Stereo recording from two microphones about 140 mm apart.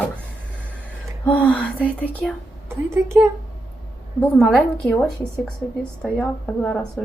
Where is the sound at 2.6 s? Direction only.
20° right (ahead or behind).